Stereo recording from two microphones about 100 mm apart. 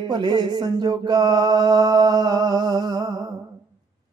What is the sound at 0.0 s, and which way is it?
Music, 45° right (ahead or behind).